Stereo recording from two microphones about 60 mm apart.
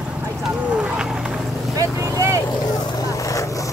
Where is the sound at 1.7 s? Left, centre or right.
Right.